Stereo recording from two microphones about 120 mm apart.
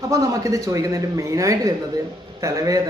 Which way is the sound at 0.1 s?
25° right (ahead or behind).